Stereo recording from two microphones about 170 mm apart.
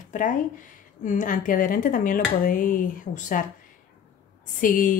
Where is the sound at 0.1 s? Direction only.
50° left (ahead or behind).